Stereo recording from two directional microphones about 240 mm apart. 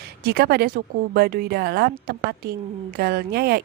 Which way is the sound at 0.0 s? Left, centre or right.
Right.